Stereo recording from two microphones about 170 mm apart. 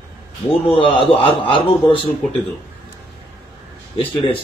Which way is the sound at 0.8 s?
30° left (ahead or behind).